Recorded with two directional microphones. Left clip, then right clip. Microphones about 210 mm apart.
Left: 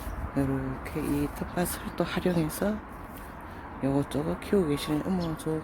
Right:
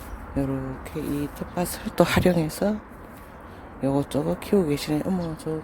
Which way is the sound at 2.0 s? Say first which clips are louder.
Right 10 dB; 30° right (ahead or behind).